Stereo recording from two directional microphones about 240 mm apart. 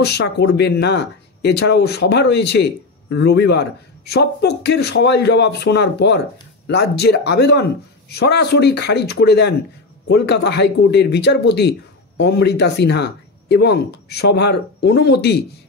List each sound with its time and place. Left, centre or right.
0.0 s speech: left